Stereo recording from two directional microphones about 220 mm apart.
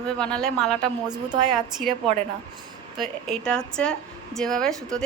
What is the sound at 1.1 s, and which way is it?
Speech, 20° right (ahead or behind).